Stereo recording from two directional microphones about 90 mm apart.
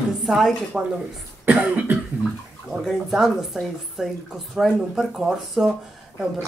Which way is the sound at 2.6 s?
Centre (ahead or behind).